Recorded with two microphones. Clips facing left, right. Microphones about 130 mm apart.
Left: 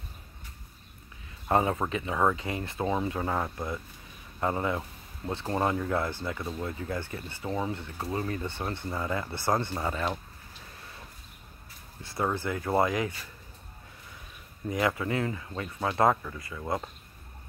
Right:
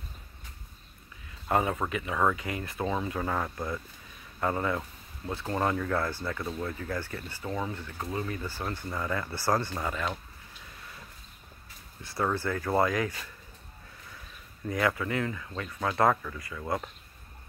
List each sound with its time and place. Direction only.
1.5 s speech: 25° left (ahead or behind)
12.0 s speech: 25° left (ahead or behind)
14.7 s speech: 20° left (ahead or behind)